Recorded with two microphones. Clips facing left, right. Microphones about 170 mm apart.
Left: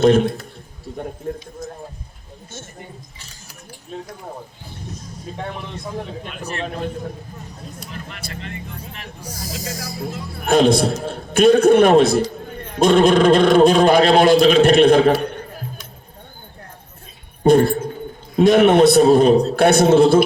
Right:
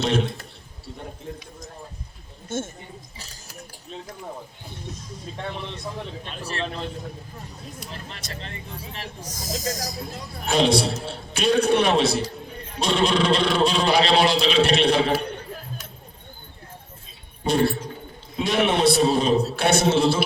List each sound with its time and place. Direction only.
0.0 s a man's voice: 50° left (ahead or behind)
0.9 s a sound: 50° left (ahead or behind)
1.2 s a man's voice: 50° left (ahead or behind)
2.5 s speech: 50° right (ahead or behind)
6.3 s a man's voice: 35° right (ahead or behind)
7.9 s a man's voice: 30° right (ahead or behind)
9.6 s a man's voice: 40° right (ahead or behind)
10.0 s a man's voice: 55° left (ahead or behind)
17.4 s a man's voice: 50° left (ahead or behind)